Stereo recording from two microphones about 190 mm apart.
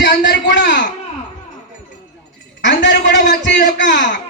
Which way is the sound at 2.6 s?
70° left (ahead or behind).